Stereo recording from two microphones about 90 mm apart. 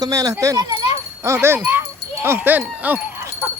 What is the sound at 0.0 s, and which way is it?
Speech, 40° right (ahead or behind).